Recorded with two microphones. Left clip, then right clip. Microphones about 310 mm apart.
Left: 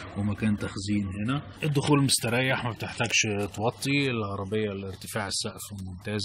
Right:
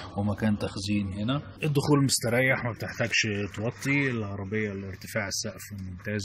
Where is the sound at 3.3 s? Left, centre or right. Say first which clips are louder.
Left 2 dB; left.